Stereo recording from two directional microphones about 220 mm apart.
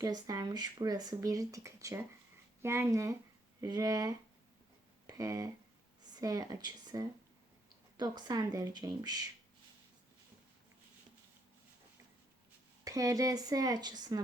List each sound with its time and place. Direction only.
0.0 s speech: 15° right (ahead or behind)
12.8 s speech: 15° right (ahead or behind)